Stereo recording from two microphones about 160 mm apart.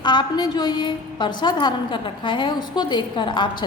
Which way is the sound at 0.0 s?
30° left (ahead or behind).